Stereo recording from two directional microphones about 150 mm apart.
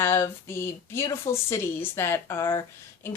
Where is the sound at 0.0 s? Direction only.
15° left (ahead or behind).